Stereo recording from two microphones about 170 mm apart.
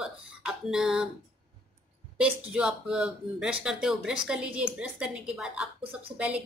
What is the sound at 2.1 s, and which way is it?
A woman's voice, 5° right (ahead or behind).